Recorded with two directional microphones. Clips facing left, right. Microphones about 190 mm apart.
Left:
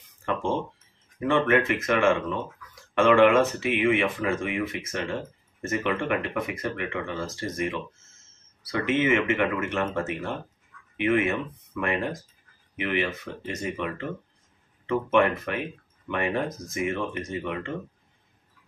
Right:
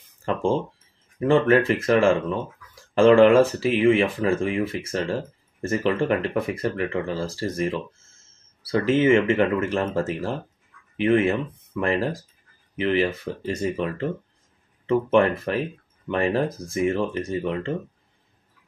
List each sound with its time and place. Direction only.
0.2 s speech: 30° right (ahead or behind)